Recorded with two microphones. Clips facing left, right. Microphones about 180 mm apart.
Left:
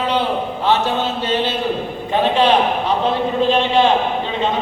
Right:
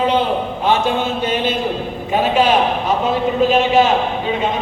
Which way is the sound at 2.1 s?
10° right (ahead or behind).